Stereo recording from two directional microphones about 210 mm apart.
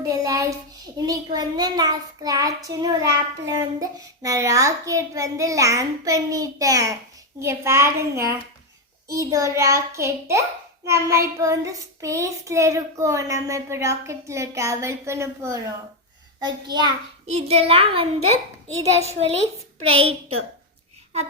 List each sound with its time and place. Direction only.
0.0 s child singing: 15° right (ahead or behind)
16.4 s a child's voice: 20° right (ahead or behind)